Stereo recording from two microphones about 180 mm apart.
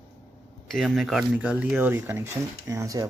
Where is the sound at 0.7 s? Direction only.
Centre (ahead or behind); by 3.0 s 20° right (ahead or behind).